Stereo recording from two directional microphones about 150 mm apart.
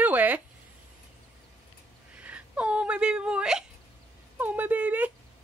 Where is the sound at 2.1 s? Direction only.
10° right (ahead or behind).